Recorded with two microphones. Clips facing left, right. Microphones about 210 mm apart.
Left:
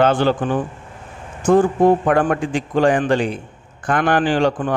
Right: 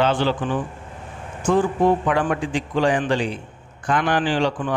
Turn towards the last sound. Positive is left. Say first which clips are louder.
# left 4 dB
turn(degrees=50)  # may be behind; listen again after turning